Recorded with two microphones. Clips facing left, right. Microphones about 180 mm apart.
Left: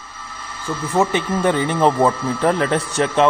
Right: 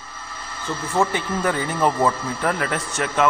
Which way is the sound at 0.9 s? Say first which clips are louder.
Left 4 dB; 20° left (ahead or behind).